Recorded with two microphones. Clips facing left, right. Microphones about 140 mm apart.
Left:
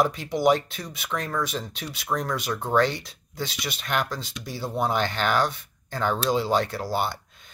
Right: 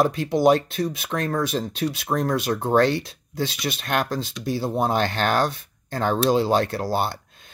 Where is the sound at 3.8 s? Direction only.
50° right (ahead or behind).